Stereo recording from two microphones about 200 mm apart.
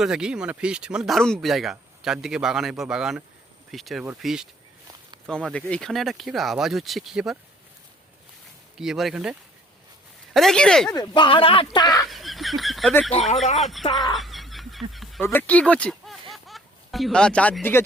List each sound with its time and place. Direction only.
0.0 s speech: 5° right (ahead or behind)
8.8 s speech: centre (ahead or behind)
10.3 s speech: centre (ahead or behind)
10.8 s speech: 20° left (ahead or behind)
12.0 s goose: centre (ahead or behind)
12.9 s speech: 10° left (ahead or behind)
13.1 s speech: 35° left (ahead or behind)
13.6 s speech: centre (ahead or behind)
14.2 s dog: centre (ahead or behind)
15.2 s speech: 10° left (ahead or behind)
16.3 s a sound: centre (ahead or behind)